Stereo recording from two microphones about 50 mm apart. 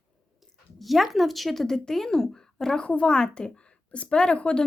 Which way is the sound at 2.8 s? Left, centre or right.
Left.